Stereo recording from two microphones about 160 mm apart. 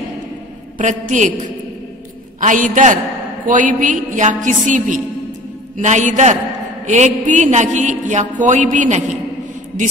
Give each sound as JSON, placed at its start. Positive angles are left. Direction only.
{"t": 0.7, "sound": "a man's voice", "side_deg": -55}
{"t": 2.4, "sound": "a man's voice", "side_deg": -55}